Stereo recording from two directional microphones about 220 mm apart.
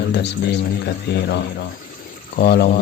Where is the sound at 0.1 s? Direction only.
50° left (ahead or behind).